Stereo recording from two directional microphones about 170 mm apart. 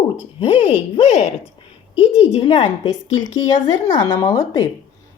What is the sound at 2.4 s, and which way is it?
Speech, 25° left (ahead or behind).